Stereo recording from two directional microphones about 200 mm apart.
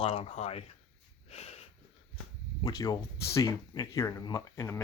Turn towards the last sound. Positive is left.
turn(degrees=15)  # may be behind; listen again after turning